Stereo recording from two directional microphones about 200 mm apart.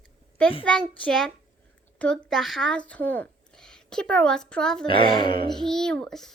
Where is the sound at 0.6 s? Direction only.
5° left (ahead or behind).